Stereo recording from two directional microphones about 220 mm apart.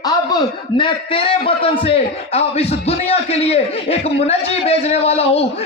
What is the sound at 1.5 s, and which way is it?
A man's voice, 25° left (ahead or behind).